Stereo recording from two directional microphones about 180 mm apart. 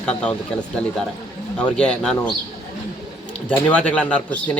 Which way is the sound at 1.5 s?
5° left (ahead or behind).